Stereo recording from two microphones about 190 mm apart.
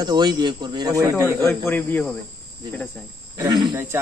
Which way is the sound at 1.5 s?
10° left (ahead or behind).